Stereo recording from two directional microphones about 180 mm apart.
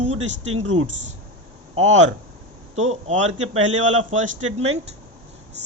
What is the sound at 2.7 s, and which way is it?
Speech, 40° right (ahead or behind).